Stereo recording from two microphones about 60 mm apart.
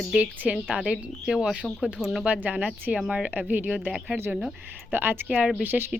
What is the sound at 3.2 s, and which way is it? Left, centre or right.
Speech, right.